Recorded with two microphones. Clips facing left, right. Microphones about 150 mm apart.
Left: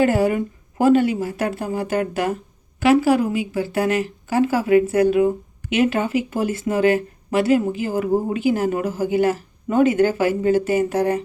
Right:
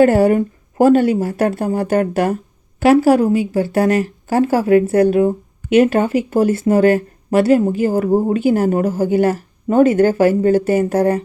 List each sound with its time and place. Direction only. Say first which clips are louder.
0.0 s a woman's voice: right 6 dB; 45° right (ahead or behind)